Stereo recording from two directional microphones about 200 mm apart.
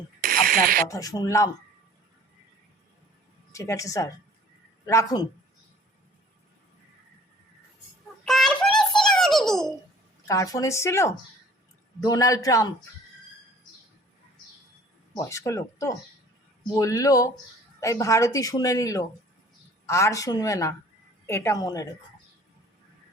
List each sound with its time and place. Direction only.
0.2 s a sound: 45° right (ahead or behind)
0.9 s speech: 15° left (ahead or behind)
3.5 s speech: 15° left (ahead or behind)
8.2 s a sound: centre (ahead or behind)
9.0 s baby laughter: centre (ahead or behind)
10.2 s speech: 15° left (ahead or behind)
15.1 s speech: 15° left (ahead or behind)